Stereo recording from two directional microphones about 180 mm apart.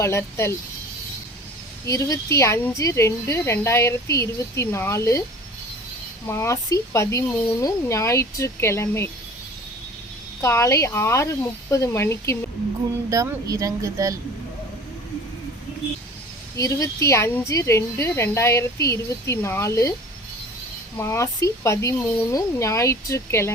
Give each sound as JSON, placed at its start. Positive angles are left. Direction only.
{"t": 0.0, "sound": "a woman's voice", "side_deg": 15}
{"t": 1.9, "sound": "a woman's voice", "side_deg": 20}
{"t": 6.2, "sound": "a woman's voice", "side_deg": 15}
{"t": 10.4, "sound": "a woman's voice", "side_deg": 15}
{"t": 13.1, "sound": "speech", "side_deg": -20}
{"t": 16.6, "sound": "a woman's voice", "side_deg": 20}
{"t": 21.0, "sound": "a woman's voice", "side_deg": 15}